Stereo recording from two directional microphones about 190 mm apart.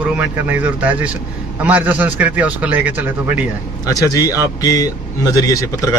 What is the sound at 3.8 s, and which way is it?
A man's voice, 20° left (ahead or behind).